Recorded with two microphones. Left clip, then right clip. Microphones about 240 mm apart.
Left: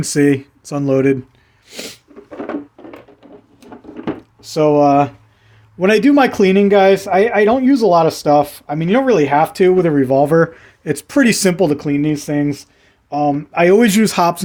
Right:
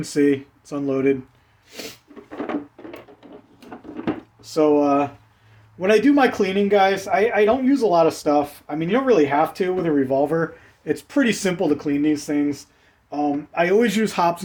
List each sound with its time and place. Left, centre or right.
0.0 s a man's voice: left
1.7 s snort: left
4.4 s a man's voice: left